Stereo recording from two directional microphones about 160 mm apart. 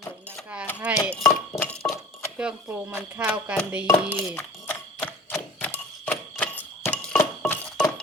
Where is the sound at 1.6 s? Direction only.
5° left (ahead or behind).